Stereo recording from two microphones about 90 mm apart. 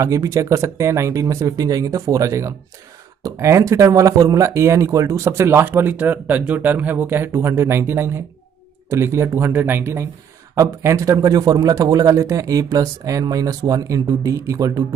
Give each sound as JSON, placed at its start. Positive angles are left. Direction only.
{"t": 0.0, "sound": "speech", "side_deg": -35}
{"t": 11.1, "sound": "speech", "side_deg": -45}